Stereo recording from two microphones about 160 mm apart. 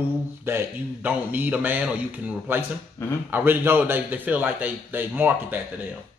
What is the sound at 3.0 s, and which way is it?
Speech, 15° left (ahead or behind).